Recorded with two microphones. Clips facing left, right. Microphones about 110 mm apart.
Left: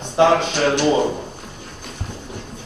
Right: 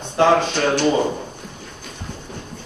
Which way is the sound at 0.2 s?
15° left (ahead or behind).